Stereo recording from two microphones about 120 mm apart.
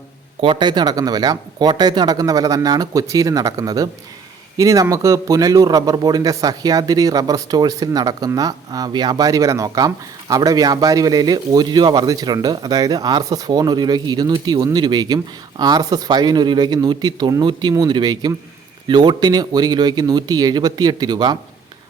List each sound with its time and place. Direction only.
0.4 s a man's voice: 40° right (ahead or behind)